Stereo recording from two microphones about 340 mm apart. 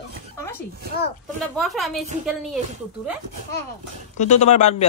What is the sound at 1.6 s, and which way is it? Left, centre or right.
Speech, centre.